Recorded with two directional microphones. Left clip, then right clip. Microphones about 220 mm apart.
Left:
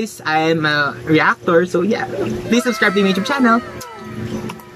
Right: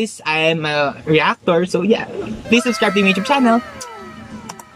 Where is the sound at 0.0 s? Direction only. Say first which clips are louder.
Even; 5° right (ahead or behind).